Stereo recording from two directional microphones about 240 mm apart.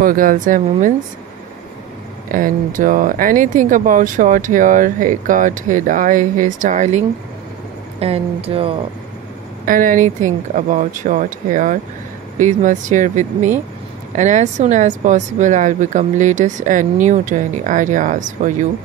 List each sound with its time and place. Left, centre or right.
0.0 s speech: right
2.3 s speech: right
9.7 s speech: right